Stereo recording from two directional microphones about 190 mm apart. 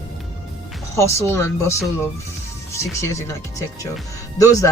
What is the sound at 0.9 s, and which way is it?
Speech, 15° left (ahead or behind).